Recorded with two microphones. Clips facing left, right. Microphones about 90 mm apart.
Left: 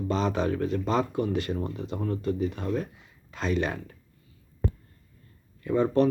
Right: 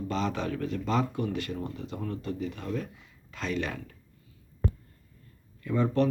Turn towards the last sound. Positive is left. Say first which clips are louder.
# left 3 dB
turn(degrees=30)  # may be behind; listen again after turning